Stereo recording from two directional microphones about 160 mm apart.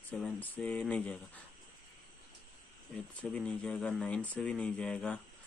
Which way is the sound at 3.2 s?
5° left (ahead or behind).